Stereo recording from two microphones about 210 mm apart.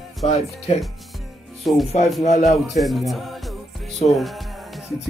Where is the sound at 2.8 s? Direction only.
Centre (ahead or behind).